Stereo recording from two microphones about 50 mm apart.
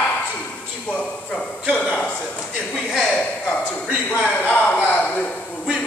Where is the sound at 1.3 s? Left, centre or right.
Centre.